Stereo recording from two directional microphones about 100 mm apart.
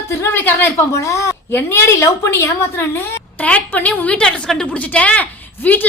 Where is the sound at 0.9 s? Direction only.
30° left (ahead or behind).